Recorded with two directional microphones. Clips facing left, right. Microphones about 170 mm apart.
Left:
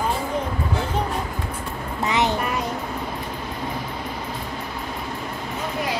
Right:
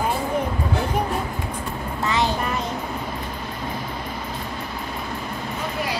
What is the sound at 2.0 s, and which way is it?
Child singing, 20° left (ahead or behind).